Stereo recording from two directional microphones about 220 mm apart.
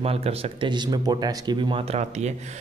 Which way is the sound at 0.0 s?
25° right (ahead or behind).